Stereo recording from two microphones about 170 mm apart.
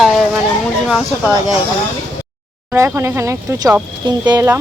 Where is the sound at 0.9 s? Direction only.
Centre (ahead or behind).